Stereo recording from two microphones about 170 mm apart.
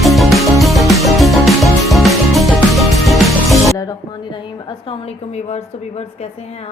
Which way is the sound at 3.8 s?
25° left (ahead or behind).